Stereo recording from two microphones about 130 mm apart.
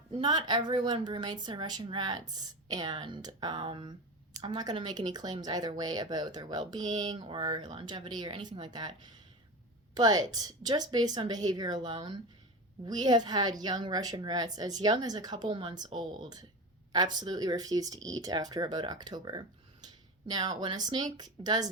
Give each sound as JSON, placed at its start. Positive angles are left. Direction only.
{"t": 0.2, "sound": "speech", "side_deg": -35}